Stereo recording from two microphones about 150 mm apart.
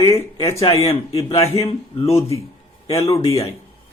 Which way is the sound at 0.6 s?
40° left (ahead or behind).